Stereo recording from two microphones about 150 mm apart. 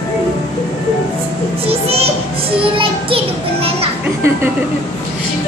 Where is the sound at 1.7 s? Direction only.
40° right (ahead or behind).